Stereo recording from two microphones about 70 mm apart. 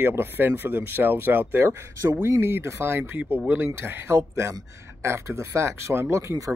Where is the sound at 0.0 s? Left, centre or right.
Right.